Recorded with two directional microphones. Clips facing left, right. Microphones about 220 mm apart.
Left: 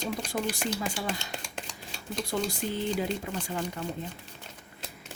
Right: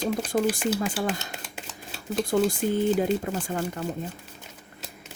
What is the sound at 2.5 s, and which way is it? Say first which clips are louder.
Speech: right 7 dB; 50° right (ahead or behind).